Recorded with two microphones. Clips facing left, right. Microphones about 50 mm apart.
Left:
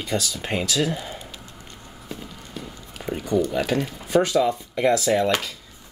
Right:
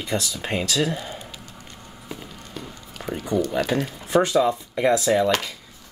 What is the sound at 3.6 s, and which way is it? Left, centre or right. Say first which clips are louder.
Speech: even; centre.